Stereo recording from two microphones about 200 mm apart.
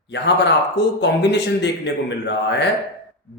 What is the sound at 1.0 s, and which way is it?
Speech, 60° left (ahead or behind).